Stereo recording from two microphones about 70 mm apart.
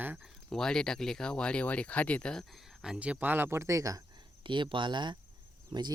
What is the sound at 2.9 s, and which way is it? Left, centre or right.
Speech, centre.